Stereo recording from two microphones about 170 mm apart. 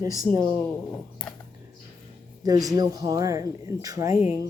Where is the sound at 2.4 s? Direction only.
20° right (ahead or behind).